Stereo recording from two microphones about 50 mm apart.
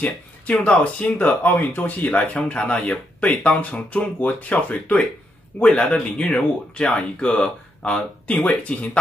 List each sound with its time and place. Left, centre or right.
0.0 s speech: left
5.6 s speech: centre